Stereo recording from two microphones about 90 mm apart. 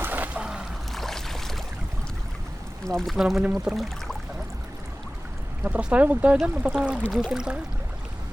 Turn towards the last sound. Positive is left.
turn(degrees=-5)  # may be behind; listen again after turning